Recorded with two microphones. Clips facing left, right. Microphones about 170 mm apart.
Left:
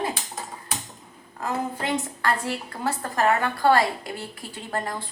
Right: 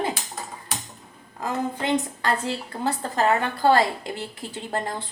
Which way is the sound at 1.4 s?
20° right (ahead or behind).